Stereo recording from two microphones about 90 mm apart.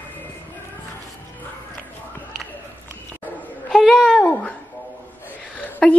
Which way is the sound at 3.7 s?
Centre (ahead or behind).